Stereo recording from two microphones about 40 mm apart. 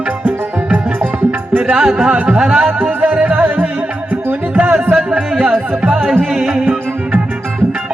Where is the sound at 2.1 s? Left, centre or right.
Right.